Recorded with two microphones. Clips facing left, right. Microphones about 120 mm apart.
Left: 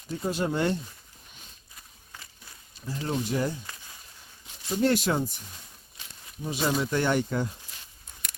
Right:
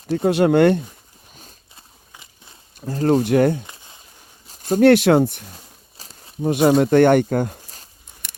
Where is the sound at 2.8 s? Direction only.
45° right (ahead or behind).